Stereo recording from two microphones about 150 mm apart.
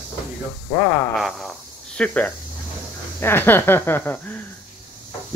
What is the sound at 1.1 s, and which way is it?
Fart, centre (ahead or behind).